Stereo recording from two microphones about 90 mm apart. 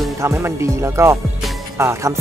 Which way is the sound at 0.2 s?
30° right (ahead or behind).